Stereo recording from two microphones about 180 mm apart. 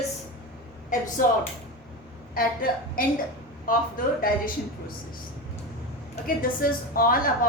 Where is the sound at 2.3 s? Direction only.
50° left (ahead or behind).